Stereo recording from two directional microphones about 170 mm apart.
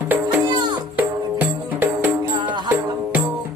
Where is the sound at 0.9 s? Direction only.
10° right (ahead or behind).